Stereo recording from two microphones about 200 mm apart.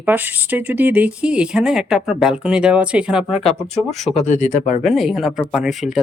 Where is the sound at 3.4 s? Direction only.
35° left (ahead or behind).